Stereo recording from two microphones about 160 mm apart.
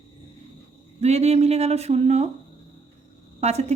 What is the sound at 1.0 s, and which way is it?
Speech, 40° right (ahead or behind).